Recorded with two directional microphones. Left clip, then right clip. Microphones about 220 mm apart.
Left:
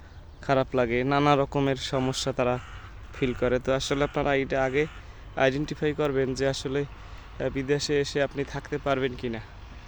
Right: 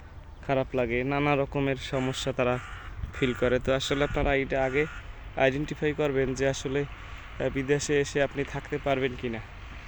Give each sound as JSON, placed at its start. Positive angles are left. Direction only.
{"t": 0.4, "sound": "speech", "side_deg": 20}